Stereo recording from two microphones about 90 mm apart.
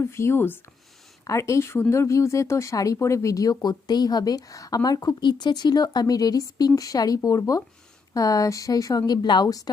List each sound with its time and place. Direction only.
0.0 s speech: 30° left (ahead or behind)
1.2 s a woman's voice: 35° left (ahead or behind)